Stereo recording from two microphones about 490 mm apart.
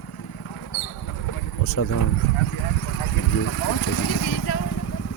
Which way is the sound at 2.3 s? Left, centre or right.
Left.